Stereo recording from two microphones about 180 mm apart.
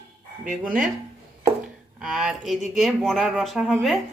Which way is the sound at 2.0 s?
5° right (ahead or behind).